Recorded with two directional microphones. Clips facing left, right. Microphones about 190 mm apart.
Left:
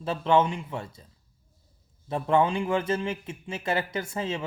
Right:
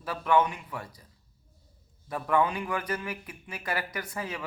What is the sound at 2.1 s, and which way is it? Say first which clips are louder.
Speech: left 3 dB; 25° left (ahead or behind).